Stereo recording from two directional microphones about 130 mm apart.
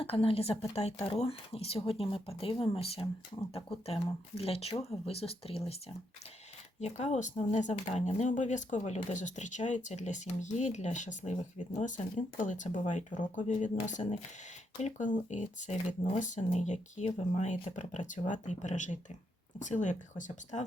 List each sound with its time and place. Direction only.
0.0 s speech: 45° left (ahead or behind)
6.7 s speech: 60° left (ahead or behind)